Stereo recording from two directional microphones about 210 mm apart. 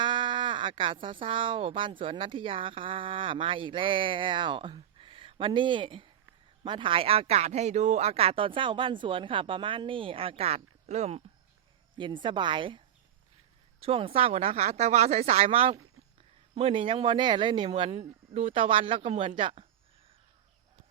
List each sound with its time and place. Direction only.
0.0 s speech: 20° right (ahead or behind)